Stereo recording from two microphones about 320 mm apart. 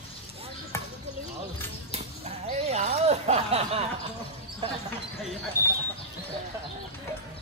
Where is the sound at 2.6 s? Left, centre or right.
Right.